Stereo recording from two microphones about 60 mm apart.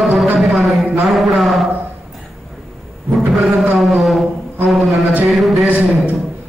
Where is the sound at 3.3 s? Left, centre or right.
Centre.